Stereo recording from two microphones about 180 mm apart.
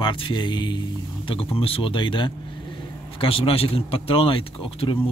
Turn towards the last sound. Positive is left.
turn(degrees=30)  # may be behind; listen again after turning